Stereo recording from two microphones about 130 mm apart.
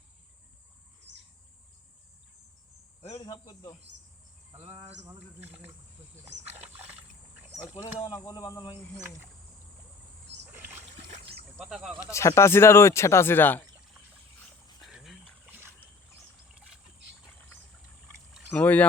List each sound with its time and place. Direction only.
3.0 s speech: 30° left (ahead or behind)
7.7 s speech: 20° left (ahead or behind)
8.3 s speech: 35° left (ahead or behind)
10.5 s boat: 15° right (ahead or behind)
11.5 s speech: 5° right (ahead or behind)
12.1 s speech: 20° left (ahead or behind)
14.8 s a sound: centre (ahead or behind)
15.4 s boat: 15° right (ahead or behind)
18.5 s speech: 10° left (ahead or behind)